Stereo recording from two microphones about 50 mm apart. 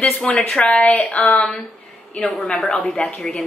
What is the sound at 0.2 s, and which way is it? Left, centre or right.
A woman's voice, centre.